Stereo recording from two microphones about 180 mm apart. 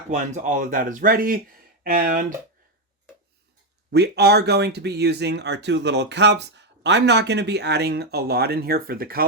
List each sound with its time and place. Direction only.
0.1 s speech: 40° right (ahead or behind)
3.9 s speech: 65° right (ahead or behind)